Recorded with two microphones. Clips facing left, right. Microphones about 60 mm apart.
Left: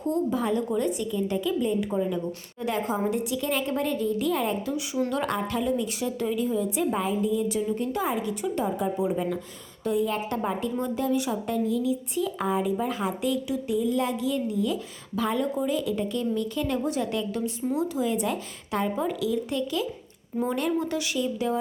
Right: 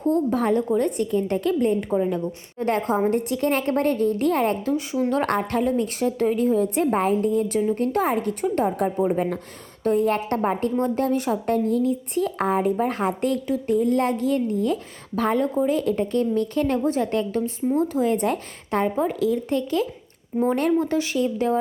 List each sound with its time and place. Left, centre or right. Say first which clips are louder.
0.0 s a woman's voice: right 5 dB; right
1.9 s a woman's voice: right 4 dB; right
5.2 s a woman's voice: right 5 dB; right